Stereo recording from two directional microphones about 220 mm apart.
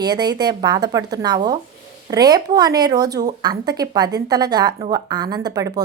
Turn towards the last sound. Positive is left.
turn(degrees=-15)  # may be behind; listen again after turning